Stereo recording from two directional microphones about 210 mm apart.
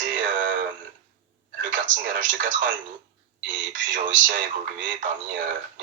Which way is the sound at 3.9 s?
40° right (ahead or behind).